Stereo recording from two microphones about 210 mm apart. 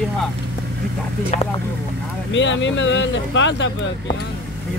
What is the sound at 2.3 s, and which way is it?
Speech, 60° left (ahead or behind).